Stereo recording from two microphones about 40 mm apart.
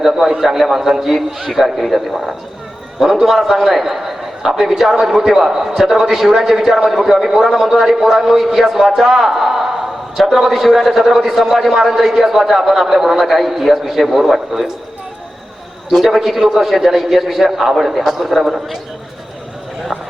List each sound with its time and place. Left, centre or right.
0.2 s a man's voice: centre
15.9 s a man's voice: centre